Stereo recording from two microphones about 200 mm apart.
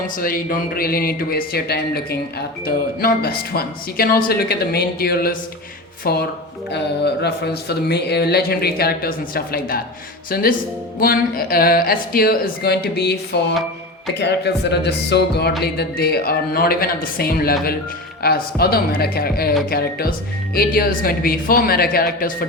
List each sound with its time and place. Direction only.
0.2 s speech: 45° left (ahead or behind)
14.2 s speech: 60° left (ahead or behind)